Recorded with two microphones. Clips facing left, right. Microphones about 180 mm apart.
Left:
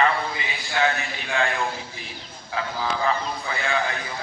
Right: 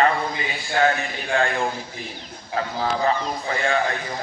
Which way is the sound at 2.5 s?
40° right (ahead or behind).